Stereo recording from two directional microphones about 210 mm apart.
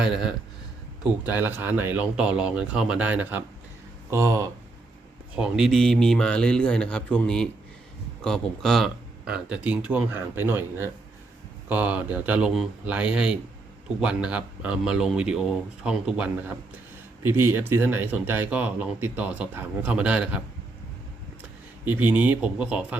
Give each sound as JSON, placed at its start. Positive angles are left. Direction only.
{"t": 0.0, "sound": "speech", "side_deg": -5}
{"t": 5.4, "sound": "speech", "side_deg": 0}
{"t": 21.8, "sound": "speech", "side_deg": -10}